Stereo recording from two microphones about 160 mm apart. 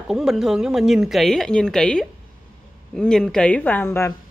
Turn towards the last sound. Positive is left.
turn(degrees=15)  # may be behind; listen again after turning